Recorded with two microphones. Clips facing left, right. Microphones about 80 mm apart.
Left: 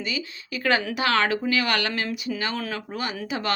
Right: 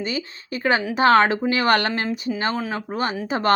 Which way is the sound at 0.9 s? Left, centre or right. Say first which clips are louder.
Right 7 dB; right.